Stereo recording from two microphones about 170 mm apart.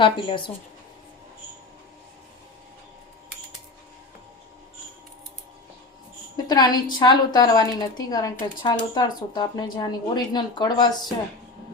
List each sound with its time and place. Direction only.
0.0 s a woman's voice: 30° left (ahead or behind)
6.3 s a woman's voice: 25° left (ahead or behind)